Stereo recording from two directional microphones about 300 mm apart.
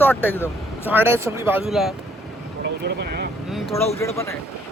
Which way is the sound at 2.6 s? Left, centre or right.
Right.